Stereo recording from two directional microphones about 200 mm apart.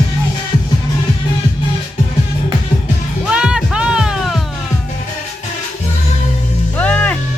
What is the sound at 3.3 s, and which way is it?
Music, 5° right (ahead or behind).